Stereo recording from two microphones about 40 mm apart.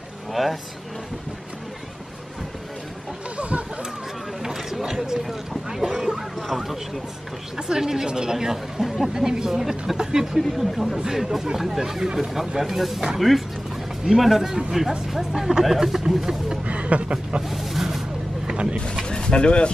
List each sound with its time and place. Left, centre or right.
0.3 s speech: centre
3.3 s chicken: right
4.4 s a sound: centre
6.3 s speech: centre
7.5 s speech: centre
16.6 s speech: right
17.5 s a sound: centre
18.5 s vehicle: right
19.0 s speech: left